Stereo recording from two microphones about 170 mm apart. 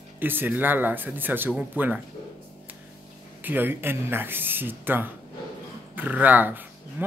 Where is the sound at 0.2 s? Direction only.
10° right (ahead or behind).